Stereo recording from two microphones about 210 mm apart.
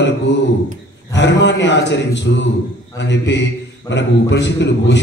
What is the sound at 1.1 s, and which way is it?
A man's voice, 55° left (ahead or behind).